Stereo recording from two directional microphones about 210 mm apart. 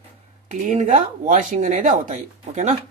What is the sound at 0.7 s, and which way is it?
Speech, 35° right (ahead or behind).